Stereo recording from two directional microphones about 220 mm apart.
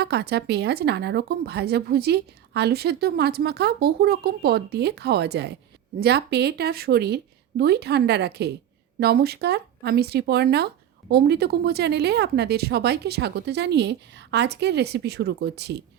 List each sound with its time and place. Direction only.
0.0 s a woman's voice: 50° right (ahead or behind)